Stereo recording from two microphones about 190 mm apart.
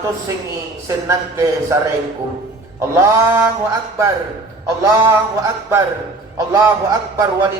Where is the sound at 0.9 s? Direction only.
15° right (ahead or behind).